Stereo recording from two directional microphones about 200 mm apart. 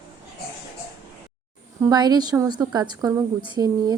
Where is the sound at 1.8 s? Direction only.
20° right (ahead or behind).